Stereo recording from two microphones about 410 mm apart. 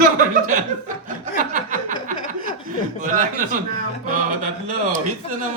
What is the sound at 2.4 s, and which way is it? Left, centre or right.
Speech, centre.